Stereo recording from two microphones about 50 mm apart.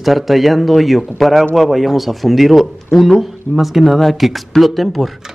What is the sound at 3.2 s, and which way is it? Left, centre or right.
Speech, centre.